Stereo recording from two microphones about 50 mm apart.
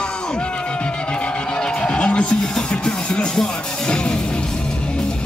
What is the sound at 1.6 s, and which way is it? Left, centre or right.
Music, left.